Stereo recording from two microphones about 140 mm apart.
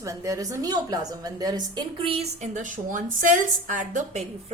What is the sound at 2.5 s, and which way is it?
A woman's voice, 65° right (ahead or behind).